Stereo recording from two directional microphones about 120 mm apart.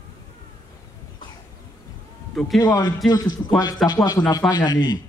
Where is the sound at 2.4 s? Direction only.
Centre (ahead or behind).